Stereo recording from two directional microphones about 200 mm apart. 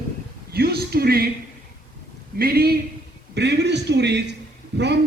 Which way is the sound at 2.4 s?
50° right (ahead or behind).